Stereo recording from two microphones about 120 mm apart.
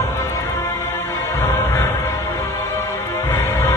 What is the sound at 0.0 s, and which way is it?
Music, 20° left (ahead or behind).